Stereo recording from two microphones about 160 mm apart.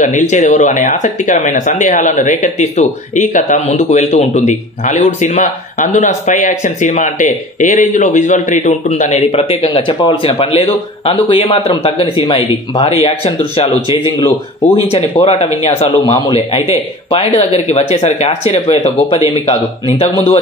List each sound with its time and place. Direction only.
0.0 s speech: 50° left (ahead or behind)
14.9 s speech: 40° left (ahead or behind)